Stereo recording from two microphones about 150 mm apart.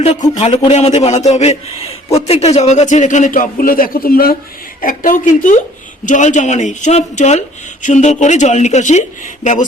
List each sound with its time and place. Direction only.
0.0 s a man's voice: 50° left (ahead or behind); by 4.4 s 85° left
4.8 s a man's voice: 65° left (ahead or behind)